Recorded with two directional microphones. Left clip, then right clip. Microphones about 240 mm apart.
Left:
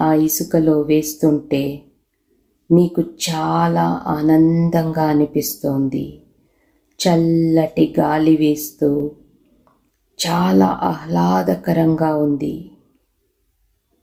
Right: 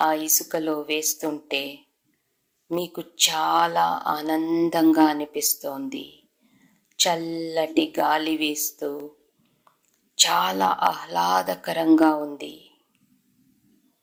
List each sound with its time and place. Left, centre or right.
0.0 s a sound: right
0.3 s speech: right
2.6 s speech: right
10.2 s speech: right